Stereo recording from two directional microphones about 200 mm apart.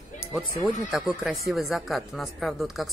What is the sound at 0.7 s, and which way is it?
Speech, centre (ahead or behind).